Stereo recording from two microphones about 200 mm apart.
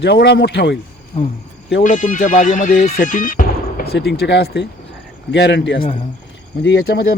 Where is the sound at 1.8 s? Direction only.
40° left (ahead or behind).